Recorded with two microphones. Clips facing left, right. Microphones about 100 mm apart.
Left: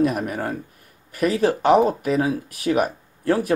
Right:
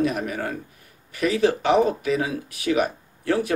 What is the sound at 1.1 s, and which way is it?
Speech, 40° left (ahead or behind).